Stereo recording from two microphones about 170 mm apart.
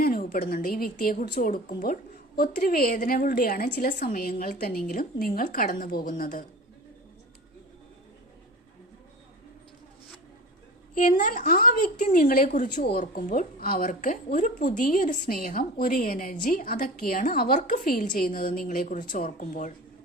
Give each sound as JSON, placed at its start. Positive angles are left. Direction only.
{"t": 0.0, "sound": "a woman's voice", "side_deg": 60}
{"t": 10.9, "sound": "a woman's voice", "side_deg": 50}